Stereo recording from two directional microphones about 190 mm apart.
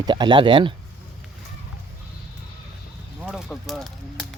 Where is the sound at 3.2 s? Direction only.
Centre (ahead or behind).